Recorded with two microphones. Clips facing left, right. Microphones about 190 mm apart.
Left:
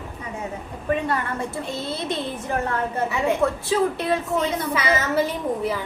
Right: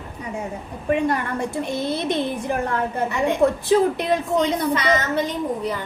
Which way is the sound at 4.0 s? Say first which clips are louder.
Right 2 dB; 15° right (ahead or behind).